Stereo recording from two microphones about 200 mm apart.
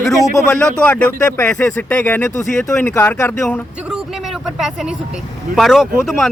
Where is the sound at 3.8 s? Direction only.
Centre (ahead or behind).